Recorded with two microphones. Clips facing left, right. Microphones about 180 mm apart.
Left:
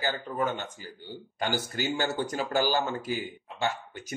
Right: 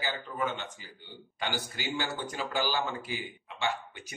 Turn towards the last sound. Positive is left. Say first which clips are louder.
# left 2 dB
turn(degrees=40)  # may be behind; listen again after turning